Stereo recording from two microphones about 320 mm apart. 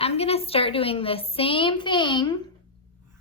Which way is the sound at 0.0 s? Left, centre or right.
Centre.